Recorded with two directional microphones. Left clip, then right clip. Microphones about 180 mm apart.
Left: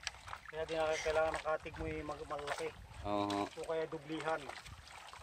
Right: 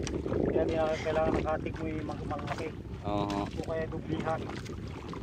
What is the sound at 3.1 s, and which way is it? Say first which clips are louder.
Speech: right 4 dB; 5° left (ahead or behind).